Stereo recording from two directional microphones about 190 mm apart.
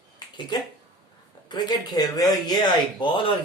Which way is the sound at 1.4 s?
20° left (ahead or behind).